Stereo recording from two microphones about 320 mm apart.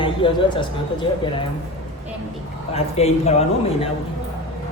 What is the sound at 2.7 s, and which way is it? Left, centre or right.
Speech, centre.